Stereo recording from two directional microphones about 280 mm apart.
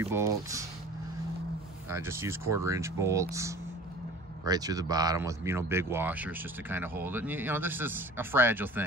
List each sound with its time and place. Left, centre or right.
0.0 s speech: centre
2.0 s speech: centre